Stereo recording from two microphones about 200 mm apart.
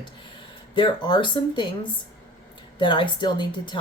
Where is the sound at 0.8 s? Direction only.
25° left (ahead or behind).